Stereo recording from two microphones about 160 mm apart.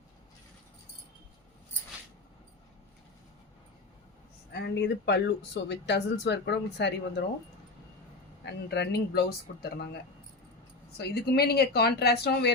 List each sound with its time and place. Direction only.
4.5 s speech: 90° left
8.4 s speech: 90° left